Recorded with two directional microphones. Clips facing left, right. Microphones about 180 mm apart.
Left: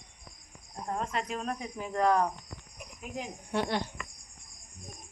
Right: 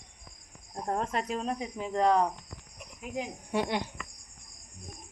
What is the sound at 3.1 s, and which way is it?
Speech, 10° right (ahead or behind).